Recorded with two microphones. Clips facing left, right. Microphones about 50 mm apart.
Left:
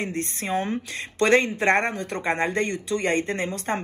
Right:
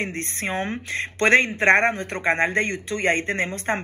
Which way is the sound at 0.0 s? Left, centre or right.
Right.